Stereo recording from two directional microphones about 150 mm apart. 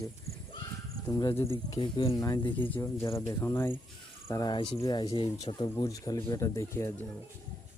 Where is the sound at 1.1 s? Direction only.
25° left (ahead or behind).